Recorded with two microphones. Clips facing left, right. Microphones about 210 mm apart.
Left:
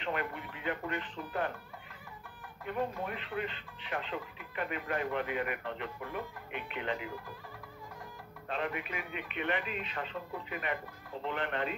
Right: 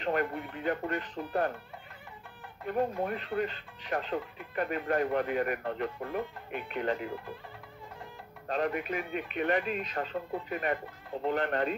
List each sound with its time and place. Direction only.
0.0 s speech: 40° right (ahead or behind)
2.6 s speech: 40° right (ahead or behind)
8.5 s speech: 40° right (ahead or behind)